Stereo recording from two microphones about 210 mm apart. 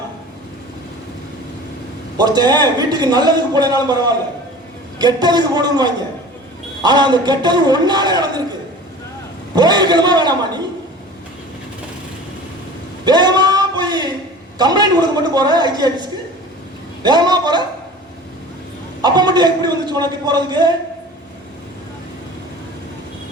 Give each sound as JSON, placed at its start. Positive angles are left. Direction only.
{"t": 2.1, "sound": "a man's voice", "side_deg": -20}
{"t": 9.6, "sound": "a man's voice", "side_deg": -20}
{"t": 13.1, "sound": "a sound", "side_deg": -20}
{"t": 14.6, "sound": "a man's voice", "side_deg": -20}
{"t": 19.0, "sound": "a man's voice", "side_deg": -20}